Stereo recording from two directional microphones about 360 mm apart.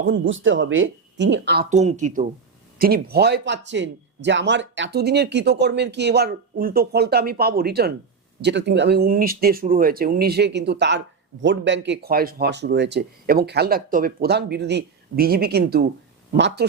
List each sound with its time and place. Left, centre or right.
0.0 s speech: right